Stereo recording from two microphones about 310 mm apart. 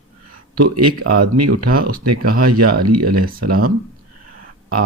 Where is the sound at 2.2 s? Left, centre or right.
Right.